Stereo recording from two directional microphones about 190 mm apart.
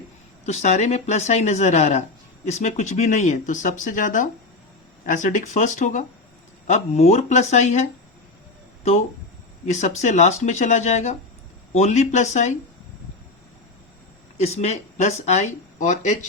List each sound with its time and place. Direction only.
0.4 s speech: 35° left (ahead or behind)
14.3 s speech: 35° left (ahead or behind)